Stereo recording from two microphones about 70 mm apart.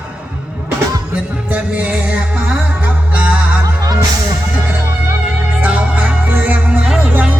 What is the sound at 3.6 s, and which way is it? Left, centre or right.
Music, right.